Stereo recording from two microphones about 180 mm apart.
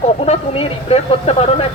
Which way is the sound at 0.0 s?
35° left (ahead or behind).